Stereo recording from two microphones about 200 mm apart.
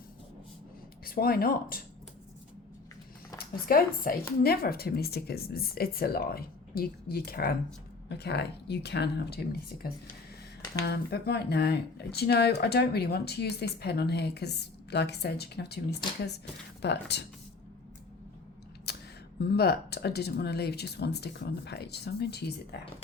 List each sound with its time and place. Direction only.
1.0 s speech: 50° left (ahead or behind)
3.3 s speech: 45° left (ahead or behind)
16.8 s speech: 55° left (ahead or behind)
18.9 s a sound: 55° left (ahead or behind)
19.4 s speech: 55° left (ahead or behind)